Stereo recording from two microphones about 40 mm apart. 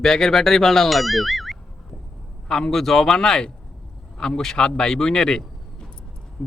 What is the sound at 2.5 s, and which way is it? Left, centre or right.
Speech, centre.